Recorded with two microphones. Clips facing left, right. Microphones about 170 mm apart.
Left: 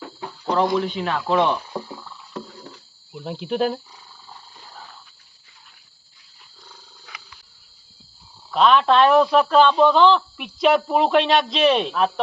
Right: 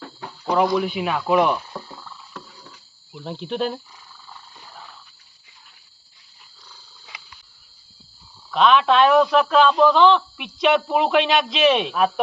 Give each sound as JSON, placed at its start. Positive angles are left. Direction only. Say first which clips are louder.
{"t": 0.4, "sound": "speech", "louder": "right 1 dB", "side_deg": -10}
{"t": 1.7, "sound": "a sound", "louder": "left 5 dB", "side_deg": 15}
{"t": 3.1, "sound": "speech", "louder": "left 2 dB", "side_deg": 10}
{"t": 8.4, "sound": "speech", "louder": "even", "side_deg": 0}